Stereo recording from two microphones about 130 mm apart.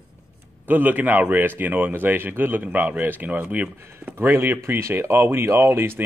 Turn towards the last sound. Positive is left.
turn(degrees=-20)  # may be behind; listen again after turning